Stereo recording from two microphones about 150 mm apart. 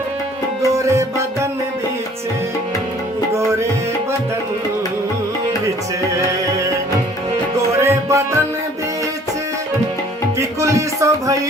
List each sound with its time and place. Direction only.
0.9 s music: 20° right (ahead or behind)
7.8 s music: 20° right (ahead or behind)
10.3 s music: 20° right (ahead or behind)